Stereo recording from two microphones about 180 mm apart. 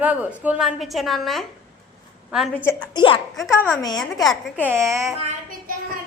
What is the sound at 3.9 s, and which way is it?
A child's voice, centre (ahead or behind).